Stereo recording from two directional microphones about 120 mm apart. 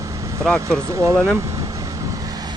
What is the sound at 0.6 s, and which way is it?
Speech, 20° right (ahead or behind).